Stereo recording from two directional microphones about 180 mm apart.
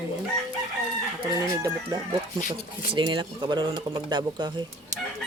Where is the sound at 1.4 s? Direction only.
20° right (ahead or behind).